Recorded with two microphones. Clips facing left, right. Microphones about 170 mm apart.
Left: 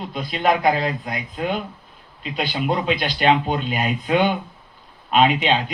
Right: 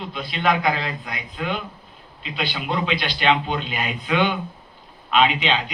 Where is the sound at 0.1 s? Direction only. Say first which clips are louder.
Left 2 dB; 45° left (ahead or behind).